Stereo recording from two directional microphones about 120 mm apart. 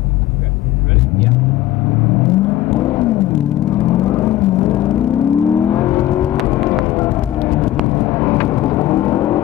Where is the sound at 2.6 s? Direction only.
25° left (ahead or behind).